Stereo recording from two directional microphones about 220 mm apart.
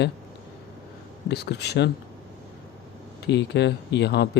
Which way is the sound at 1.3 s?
50° left (ahead or behind).